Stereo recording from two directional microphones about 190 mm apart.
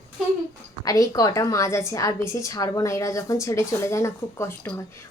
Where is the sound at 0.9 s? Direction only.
20° left (ahead or behind).